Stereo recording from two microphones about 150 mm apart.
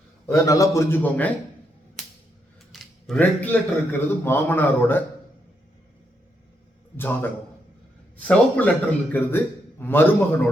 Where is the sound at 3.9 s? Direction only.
15° left (ahead or behind).